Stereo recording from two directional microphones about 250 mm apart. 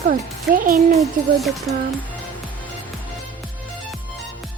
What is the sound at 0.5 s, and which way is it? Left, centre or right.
Speech, right.